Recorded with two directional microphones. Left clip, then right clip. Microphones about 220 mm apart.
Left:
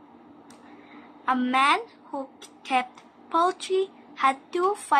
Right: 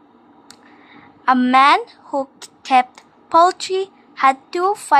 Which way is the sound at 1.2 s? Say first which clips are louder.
Right 10 dB; 40° right (ahead or behind).